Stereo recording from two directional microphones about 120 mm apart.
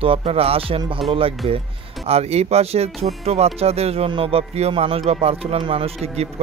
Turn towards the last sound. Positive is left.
turn(degrees=-60)  # may be behind; listen again after turning